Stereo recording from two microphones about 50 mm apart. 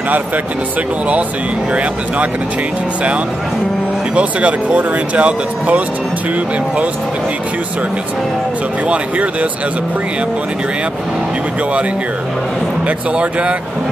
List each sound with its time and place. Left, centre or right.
1.7 s speech: right
4.1 s speech: right
8.8 s speech: right
12.8 s speech: right